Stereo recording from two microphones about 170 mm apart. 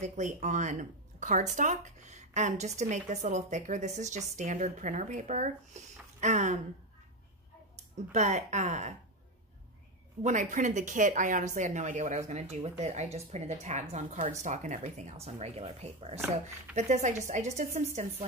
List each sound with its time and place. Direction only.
0.0 s speech: 45° right (ahead or behind)
7.7 s speech: 45° right (ahead or behind)
10.2 s speech: 45° right (ahead or behind)